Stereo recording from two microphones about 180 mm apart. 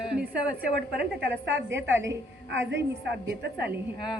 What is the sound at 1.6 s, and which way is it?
A woman's voice, 80° right.